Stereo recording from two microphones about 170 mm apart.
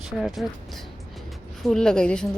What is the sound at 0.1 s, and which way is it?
A woman's voice, centre (ahead or behind).